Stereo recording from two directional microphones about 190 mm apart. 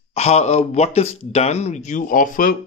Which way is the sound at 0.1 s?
35° left (ahead or behind).